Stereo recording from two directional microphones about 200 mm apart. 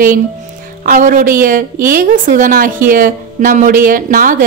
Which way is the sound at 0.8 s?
45° right (ahead or behind).